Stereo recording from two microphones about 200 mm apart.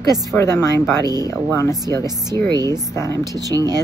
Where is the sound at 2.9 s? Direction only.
15° left (ahead or behind).